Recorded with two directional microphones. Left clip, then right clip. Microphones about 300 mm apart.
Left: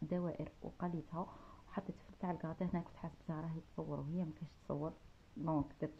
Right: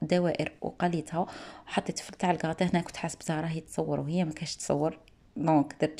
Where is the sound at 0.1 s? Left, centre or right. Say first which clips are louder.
Right 16 dB; centre.